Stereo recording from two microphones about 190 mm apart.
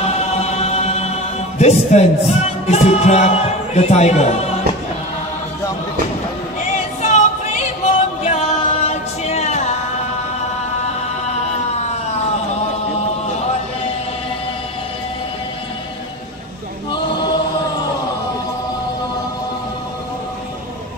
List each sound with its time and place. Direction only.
0.0 s music: 35° left (ahead or behind)
7.0 s music: 40° left (ahead or behind)